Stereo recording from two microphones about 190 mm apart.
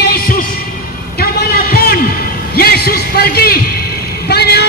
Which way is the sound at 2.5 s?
55° left (ahead or behind).